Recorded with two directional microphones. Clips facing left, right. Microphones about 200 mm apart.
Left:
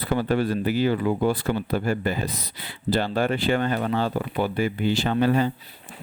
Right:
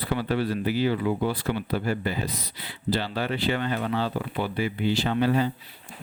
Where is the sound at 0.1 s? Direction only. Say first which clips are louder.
Left 4 dB; 45° left (ahead or behind).